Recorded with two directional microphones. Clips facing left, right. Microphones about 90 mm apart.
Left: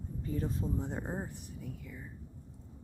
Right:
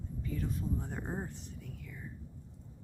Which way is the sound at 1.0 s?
5° left (ahead or behind).